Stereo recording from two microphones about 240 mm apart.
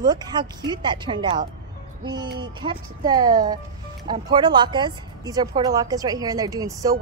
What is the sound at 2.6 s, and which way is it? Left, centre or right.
Speech, centre.